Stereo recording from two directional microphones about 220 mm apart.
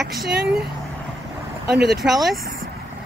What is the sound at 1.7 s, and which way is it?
Speech, 45° right (ahead or behind).